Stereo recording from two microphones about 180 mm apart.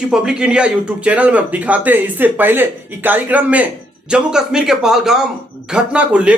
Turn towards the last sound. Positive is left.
turn(degrees=-5)  # may be behind; listen again after turning